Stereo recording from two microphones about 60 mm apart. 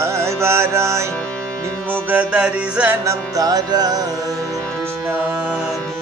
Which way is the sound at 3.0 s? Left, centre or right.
Right.